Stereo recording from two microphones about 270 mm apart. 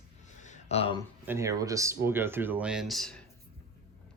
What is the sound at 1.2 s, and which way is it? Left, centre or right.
Speech, centre.